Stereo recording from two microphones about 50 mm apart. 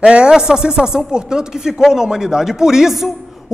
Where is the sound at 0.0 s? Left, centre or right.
Centre.